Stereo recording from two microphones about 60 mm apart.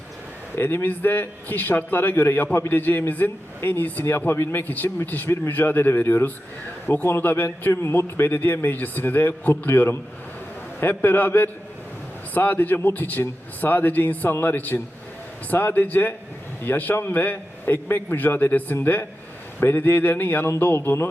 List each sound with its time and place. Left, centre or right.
0.5 s a man's voice: left
7.6 s a man's voice: left
20.7 s music: left